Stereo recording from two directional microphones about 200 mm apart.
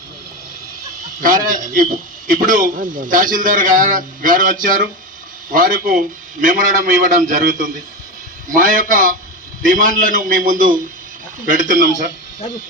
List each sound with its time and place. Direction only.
1.2 s a man's voice: 45° right (ahead or behind)